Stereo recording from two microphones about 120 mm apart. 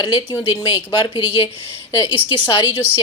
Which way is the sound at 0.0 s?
40° left (ahead or behind).